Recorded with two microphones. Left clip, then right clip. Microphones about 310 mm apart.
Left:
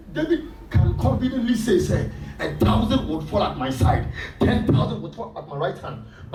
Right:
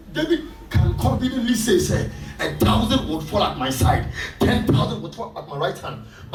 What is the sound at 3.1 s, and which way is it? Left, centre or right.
Speech, centre.